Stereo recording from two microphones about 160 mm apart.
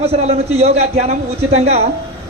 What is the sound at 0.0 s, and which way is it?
A man's voice, 40° right (ahead or behind).